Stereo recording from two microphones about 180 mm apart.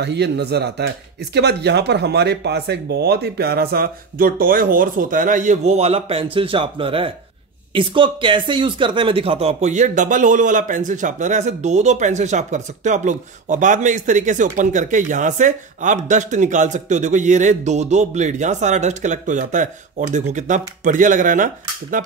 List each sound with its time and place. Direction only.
0.0 s speech: 70° right (ahead or behind); by 21.5 s 45° right (ahead or behind)